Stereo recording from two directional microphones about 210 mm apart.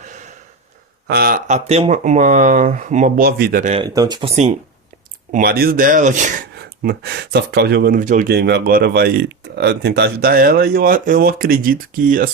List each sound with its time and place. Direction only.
1.0 s speech: 50° right (ahead or behind)
3.8 s speech: 15° right (ahead or behind)
5.3 s speech: 45° right (ahead or behind)
6.6 s speech: 50° right (ahead or behind)